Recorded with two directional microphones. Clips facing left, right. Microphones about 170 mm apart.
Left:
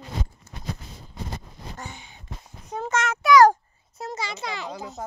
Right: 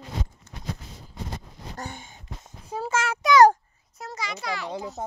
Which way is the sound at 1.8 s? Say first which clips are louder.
Right 3 dB; 50° right (ahead or behind).